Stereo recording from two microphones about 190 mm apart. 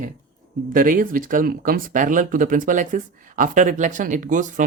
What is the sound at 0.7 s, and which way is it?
Speech, 45° right (ahead or behind).